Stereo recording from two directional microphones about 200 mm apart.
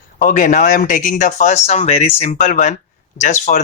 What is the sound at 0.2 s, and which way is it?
Speech, 40° left (ahead or behind).